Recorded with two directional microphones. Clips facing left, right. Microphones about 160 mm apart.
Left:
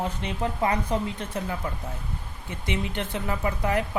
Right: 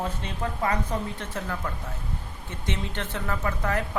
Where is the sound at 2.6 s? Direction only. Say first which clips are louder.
Left 3 dB; 15° left (ahead or behind).